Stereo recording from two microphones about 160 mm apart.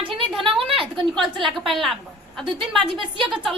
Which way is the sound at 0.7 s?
30° right (ahead or behind).